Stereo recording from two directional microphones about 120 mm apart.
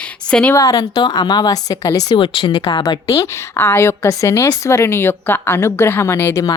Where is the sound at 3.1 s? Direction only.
25° left (ahead or behind).